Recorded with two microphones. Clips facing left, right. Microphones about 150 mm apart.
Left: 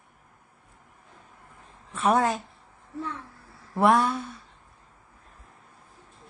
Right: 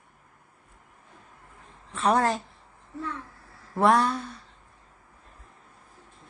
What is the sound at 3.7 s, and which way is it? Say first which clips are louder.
Speech: even; centre (ahead or behind).